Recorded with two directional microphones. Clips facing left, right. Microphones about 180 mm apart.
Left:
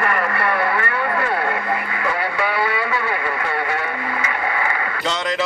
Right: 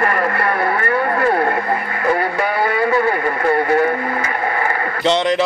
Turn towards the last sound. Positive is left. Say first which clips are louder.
# right 7 dB
turn(degrees=-30)  # may be behind; listen again after turning